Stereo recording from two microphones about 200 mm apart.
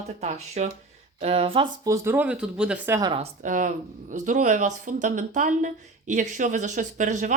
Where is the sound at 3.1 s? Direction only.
35° right (ahead or behind).